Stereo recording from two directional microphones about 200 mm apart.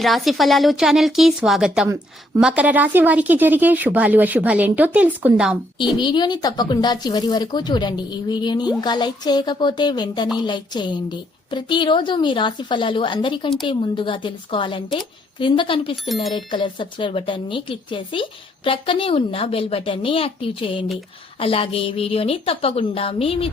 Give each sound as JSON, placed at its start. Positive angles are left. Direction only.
{"t": 0.0, "sound": "a woman's voice", "side_deg": 0}
{"t": 6.0, "sound": "speech", "side_deg": 20}
{"t": 16.0, "sound": "a woman's voice", "side_deg": 0}
{"t": 16.3, "sound": "speech", "side_deg": 25}